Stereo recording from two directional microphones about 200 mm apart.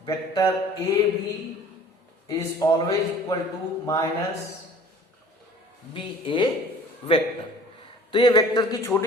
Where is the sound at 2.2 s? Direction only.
20° left (ahead or behind).